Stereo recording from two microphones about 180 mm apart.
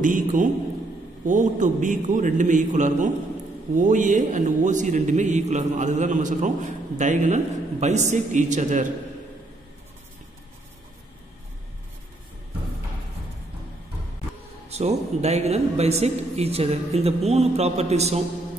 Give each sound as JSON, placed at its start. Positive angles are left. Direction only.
{"t": 0.0, "sound": "a man's voice", "side_deg": -45}
{"t": 14.7, "sound": "speech", "side_deg": -35}